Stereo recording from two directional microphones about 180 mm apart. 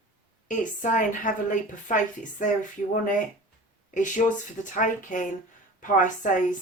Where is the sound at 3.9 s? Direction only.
45° left (ahead or behind).